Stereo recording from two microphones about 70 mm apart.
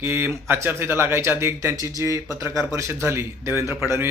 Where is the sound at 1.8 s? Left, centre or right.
Right.